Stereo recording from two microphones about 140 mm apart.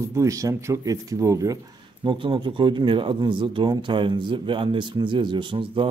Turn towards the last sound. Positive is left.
turn(degrees=-35)  # may be behind; listen again after turning